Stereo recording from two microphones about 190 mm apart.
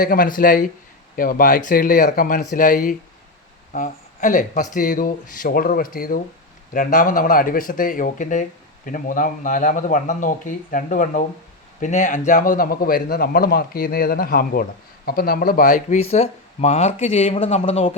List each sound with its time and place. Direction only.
0.0 s a man's voice: 50° left (ahead or behind); by 17.9 s 30° left (ahead or behind)